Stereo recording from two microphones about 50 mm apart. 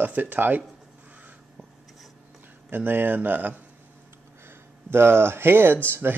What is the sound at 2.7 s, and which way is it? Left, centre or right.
Speech, right.